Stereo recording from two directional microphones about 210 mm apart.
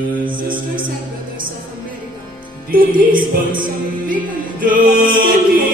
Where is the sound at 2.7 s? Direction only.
40° right (ahead or behind).